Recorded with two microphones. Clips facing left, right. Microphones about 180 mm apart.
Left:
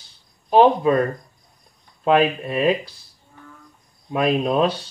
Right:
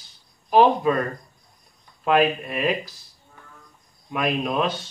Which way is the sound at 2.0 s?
25° left (ahead or behind).